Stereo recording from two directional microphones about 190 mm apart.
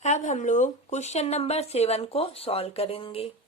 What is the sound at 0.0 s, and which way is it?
Speech, 40° left (ahead or behind).